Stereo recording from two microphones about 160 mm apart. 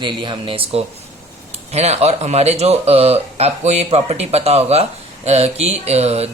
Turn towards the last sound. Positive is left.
turn(degrees=-40)  # may be behind; listen again after turning